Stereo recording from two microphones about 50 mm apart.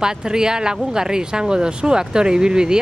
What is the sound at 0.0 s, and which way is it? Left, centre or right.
Speech, centre.